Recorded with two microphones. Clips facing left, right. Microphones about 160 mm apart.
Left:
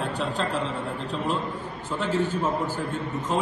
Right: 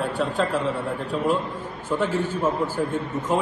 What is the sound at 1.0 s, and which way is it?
A man's voice, 10° right (ahead or behind).